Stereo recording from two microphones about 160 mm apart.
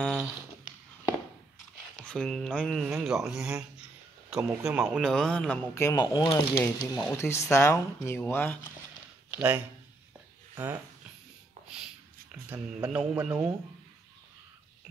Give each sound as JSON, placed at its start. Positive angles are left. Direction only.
{"t": 0.0, "sound": "a sound", "side_deg": -5}
{"t": 2.0, "sound": "speech", "side_deg": 5}
{"t": 5.8, "sound": "speech", "side_deg": 20}
{"t": 9.3, "sound": "speech", "side_deg": -15}
{"t": 11.7, "sound": "speech", "side_deg": -5}